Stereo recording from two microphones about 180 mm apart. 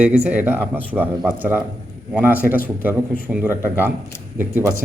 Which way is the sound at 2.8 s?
10° right (ahead or behind).